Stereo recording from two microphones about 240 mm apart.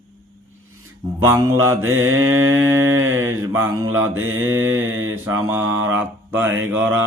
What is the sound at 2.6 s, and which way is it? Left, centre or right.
Mantra, centre.